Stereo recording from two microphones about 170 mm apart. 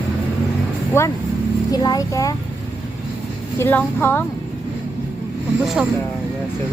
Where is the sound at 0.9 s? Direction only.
15° left (ahead or behind).